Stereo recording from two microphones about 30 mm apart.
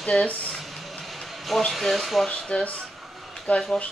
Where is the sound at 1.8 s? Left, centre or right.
Centre.